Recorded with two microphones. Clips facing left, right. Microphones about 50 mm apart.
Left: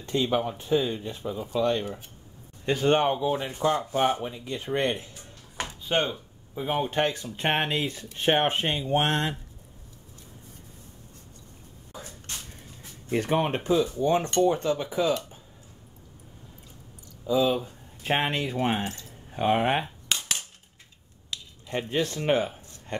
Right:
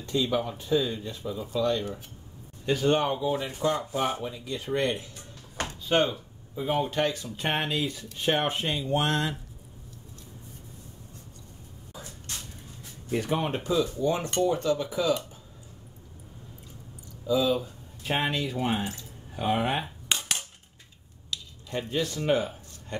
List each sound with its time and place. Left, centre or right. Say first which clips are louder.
0.0 s speech: left 1 dB; left
6.8 s speech: left 3 dB; left
13.1 s speech: left 3 dB; left
17.3 s speech: left 1 dB; left
20.1 s cap gun: even; centre
21.3 s a sound: left 2 dB; left